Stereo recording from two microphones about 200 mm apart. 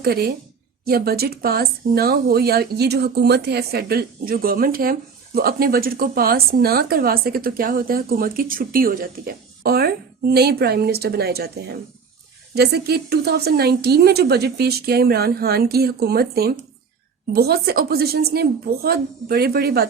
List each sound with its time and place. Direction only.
0.0 s speech: 50° right (ahead or behind)